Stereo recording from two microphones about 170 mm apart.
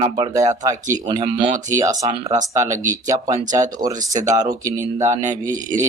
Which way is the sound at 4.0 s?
50° right (ahead or behind).